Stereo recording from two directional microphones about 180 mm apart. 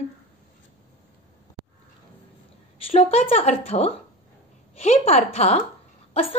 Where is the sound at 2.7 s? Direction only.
35° left (ahead or behind).